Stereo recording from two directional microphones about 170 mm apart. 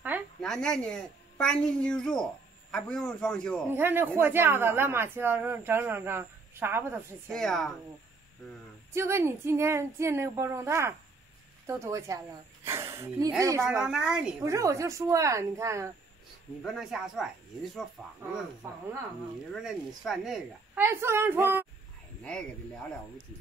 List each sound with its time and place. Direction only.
0.4 s a woman's voice: 5° left (ahead or behind)
3.6 s speech: 15° right (ahead or behind)
7.3 s a man's voice: centre (ahead or behind)
8.9 s speech: 15° right (ahead or behind)
13.7 s a man's voice: 5° right (ahead or behind)
14.4 s speech: 15° right (ahead or behind)
16.6 s a man's voice: centre (ahead or behind)
19.5 s a man's voice: centre (ahead or behind)
20.7 s speech: 15° right (ahead or behind)